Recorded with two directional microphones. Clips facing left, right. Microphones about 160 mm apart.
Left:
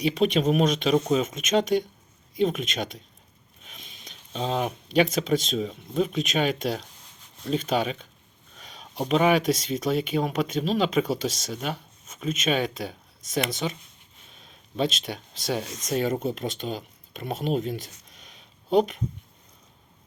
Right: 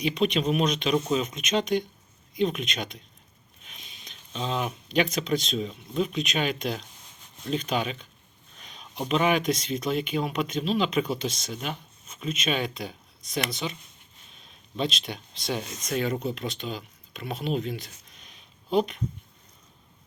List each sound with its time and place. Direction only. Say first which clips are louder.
0.0 s speech: left 3 dB; 45° left (ahead or behind)